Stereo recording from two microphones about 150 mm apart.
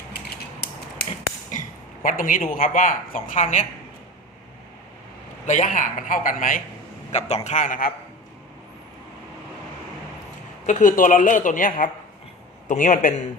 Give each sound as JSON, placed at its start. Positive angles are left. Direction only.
{"t": 0.1, "sound": "mechanisms", "side_deg": 90}
{"t": 2.0, "sound": "speech", "side_deg": 65}
{"t": 5.5, "sound": "speech", "side_deg": 55}
{"t": 7.1, "sound": "a man's voice", "side_deg": 45}
{"t": 10.7, "sound": "speech", "side_deg": 60}